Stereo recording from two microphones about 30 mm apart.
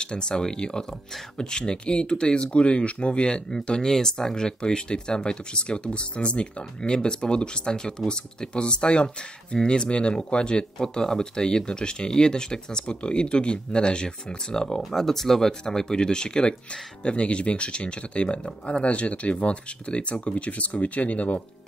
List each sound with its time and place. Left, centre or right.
0.0 s speech: left
3.7 s speech: centre
10.8 s speech: left
14.8 s speech: centre; by 16.5 s left
17.0 s speech: left